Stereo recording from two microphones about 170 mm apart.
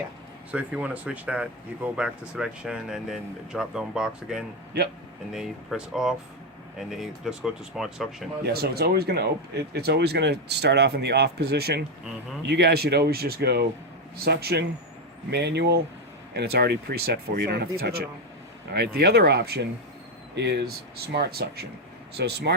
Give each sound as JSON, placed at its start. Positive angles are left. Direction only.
{"t": 0.5, "sound": "speech", "side_deg": -5}
{"t": 8.5, "sound": "speech", "side_deg": -70}